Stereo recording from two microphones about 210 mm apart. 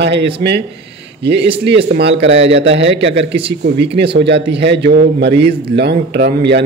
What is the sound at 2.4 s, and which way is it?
Speech, 55° right (ahead or behind).